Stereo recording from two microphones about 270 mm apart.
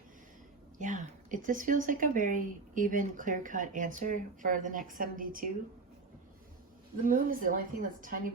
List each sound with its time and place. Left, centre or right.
0.8 s speech: right
7.1 s a woman's voice: right